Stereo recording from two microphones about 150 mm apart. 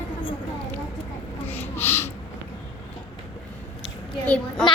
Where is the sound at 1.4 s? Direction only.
15° left (ahead or behind).